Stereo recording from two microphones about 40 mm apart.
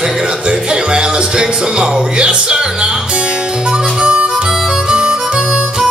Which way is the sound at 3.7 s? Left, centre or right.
Right.